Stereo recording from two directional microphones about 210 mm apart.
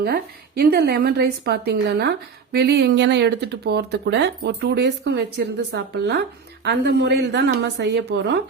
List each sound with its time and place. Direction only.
0.0 s a woman's voice: 45° right (ahead or behind)